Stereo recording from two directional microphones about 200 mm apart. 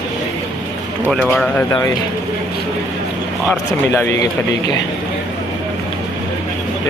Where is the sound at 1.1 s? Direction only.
5° left (ahead or behind).